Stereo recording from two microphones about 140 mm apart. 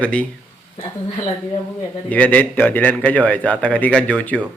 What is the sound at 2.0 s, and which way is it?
A man's voice, 10° left (ahead or behind).